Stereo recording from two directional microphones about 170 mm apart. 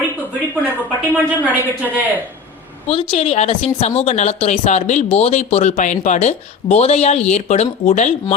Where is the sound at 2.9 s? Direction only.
35° left (ahead or behind).